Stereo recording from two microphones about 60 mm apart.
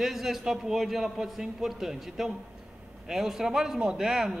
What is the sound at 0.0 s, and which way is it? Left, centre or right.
A man's voice, centre.